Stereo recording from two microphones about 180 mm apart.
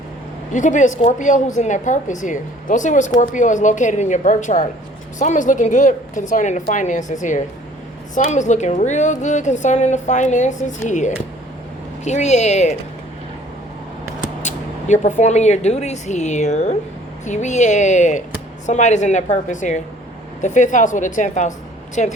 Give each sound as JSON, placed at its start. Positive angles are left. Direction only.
{"t": 0.5, "sound": "a woman's voice", "side_deg": 45}
{"t": 14.4, "sound": "a woman's voice", "side_deg": 40}